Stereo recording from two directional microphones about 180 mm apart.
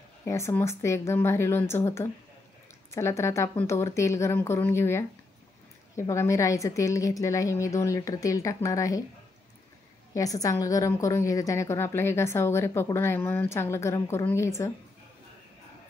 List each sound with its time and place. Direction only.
0.2 s a woman's voice: 15° left (ahead or behind)
10.1 s a woman's voice: 20° left (ahead or behind)